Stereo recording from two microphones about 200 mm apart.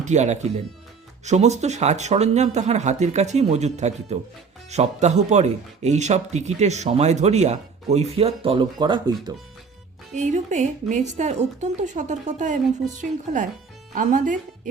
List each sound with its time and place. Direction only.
0.0 s speech: 35° right (ahead or behind)
10.2 s speech: 35° right (ahead or behind)